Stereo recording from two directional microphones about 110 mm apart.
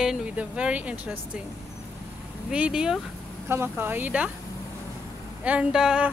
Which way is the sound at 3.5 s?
20° right (ahead or behind).